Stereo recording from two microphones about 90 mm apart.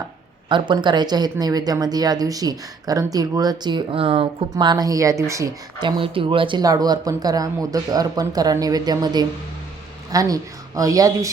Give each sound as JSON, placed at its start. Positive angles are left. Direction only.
{"t": 0.4, "sound": "speech", "side_deg": -65}
{"t": 3.9, "sound": "speech", "side_deg": -80}
{"t": 4.5, "sound": "speech", "side_deg": -50}
{"t": 4.9, "sound": "speech", "side_deg": -35}
{"t": 5.8, "sound": "speech", "side_deg": -75}
{"t": 6.6, "sound": "speech", "side_deg": -45}